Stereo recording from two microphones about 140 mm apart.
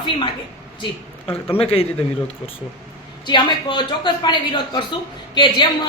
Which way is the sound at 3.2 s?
35° left (ahead or behind).